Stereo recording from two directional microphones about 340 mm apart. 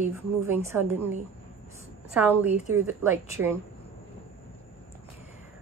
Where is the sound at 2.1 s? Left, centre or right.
Centre.